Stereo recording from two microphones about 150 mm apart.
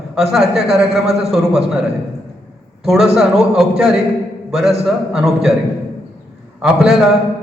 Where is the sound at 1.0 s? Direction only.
45° right (ahead or behind).